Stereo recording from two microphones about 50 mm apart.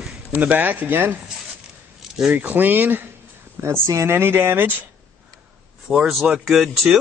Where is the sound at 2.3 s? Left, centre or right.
Right.